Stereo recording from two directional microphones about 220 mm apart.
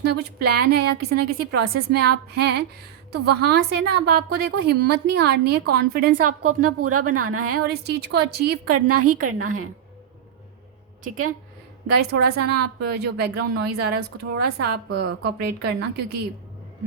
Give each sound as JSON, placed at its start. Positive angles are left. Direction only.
{"t": 0.0, "sound": "a woman's voice", "side_deg": -45}
{"t": 6.1, "sound": "a woman's voice", "side_deg": -90}
{"t": 7.7, "sound": "a woman's voice", "side_deg": -45}
{"t": 8.6, "sound": "a woman's voice", "side_deg": -90}
{"t": 11.9, "sound": "a woman's voice", "side_deg": -45}